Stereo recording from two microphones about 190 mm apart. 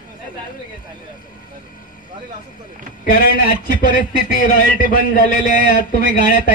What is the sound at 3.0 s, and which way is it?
A man's voice, 45° left (ahead or behind).